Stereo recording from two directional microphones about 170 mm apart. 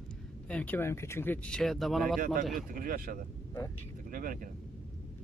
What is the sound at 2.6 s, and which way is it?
Speech, 55° right (ahead or behind).